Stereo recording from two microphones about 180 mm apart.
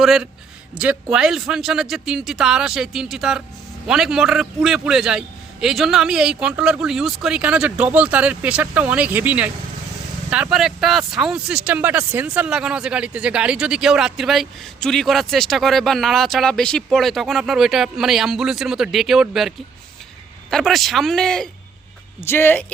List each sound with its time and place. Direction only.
0.0 s speech: centre (ahead or behind)